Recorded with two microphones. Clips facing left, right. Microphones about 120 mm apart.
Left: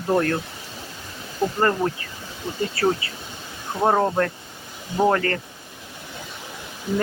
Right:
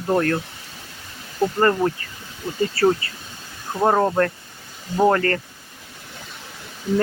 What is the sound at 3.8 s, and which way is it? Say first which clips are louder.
Speech: right 2 dB; centre (ahead or behind).